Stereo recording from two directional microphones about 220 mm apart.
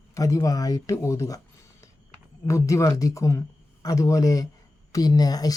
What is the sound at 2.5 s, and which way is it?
Speech, 15° left (ahead or behind).